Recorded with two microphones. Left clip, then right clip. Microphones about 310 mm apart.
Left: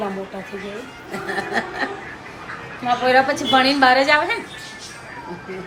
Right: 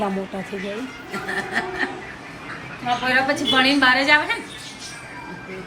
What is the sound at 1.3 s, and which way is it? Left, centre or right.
A woman's voice, left.